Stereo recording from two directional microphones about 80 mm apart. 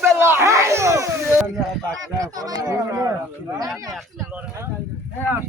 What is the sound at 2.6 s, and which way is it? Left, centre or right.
Speech, right.